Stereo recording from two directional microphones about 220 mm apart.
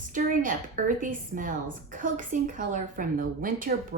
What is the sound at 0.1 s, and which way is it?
Speech, 35° right (ahead or behind).